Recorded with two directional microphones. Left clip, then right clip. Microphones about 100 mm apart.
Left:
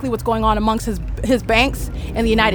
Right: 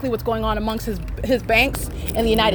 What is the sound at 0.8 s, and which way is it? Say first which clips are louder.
Speech: left 2 dB; 50° left (ahead or behind).